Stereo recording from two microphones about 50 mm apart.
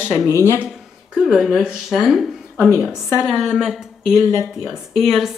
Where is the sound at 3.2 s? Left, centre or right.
Centre.